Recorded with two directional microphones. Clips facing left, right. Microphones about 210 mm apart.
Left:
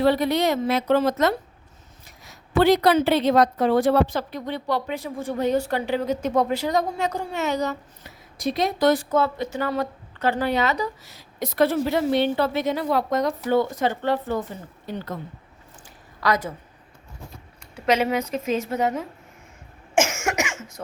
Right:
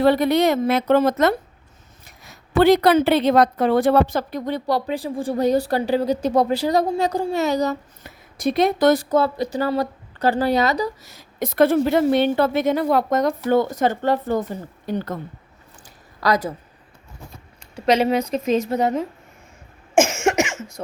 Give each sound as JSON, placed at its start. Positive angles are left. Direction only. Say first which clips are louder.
{"t": 0.0, "sound": "a woman's voice", "louder": "right 4 dB", "side_deg": -55}
{"t": 8.0, "sound": "a woman's voice", "louder": "right 4 dB", "side_deg": -55}
{"t": 8.9, "sound": "speech", "louder": "right 3 dB", "side_deg": -40}
{"t": 16.2, "sound": "a woman's voice", "louder": "right 3 dB", "side_deg": -35}
{"t": 17.8, "sound": "a woman's voice", "louder": "right 4 dB", "side_deg": -35}
{"t": 20.0, "sound": "cough", "louder": "right 5 dB", "side_deg": -30}
{"t": 20.8, "sound": "a sound", "louder": "right 4 dB", "side_deg": -25}